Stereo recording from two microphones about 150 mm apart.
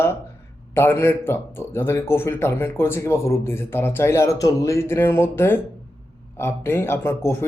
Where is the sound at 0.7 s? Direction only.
15° left (ahead or behind).